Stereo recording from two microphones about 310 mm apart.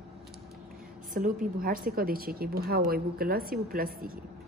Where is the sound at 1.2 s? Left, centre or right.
Right.